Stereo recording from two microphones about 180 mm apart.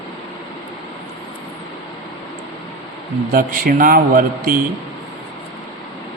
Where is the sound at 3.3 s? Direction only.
50° right (ahead or behind).